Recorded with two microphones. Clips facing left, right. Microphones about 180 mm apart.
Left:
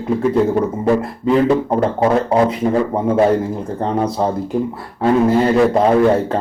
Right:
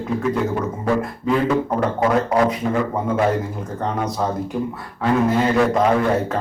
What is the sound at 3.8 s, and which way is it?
Speech, 30° left (ahead or behind).